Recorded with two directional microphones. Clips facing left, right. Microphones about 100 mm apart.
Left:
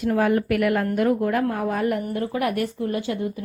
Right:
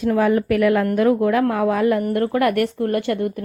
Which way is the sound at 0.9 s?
90° right.